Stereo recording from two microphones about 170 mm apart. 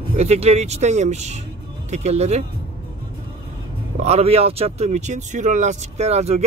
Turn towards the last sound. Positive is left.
turn(degrees=-40)  # may be behind; listen again after turning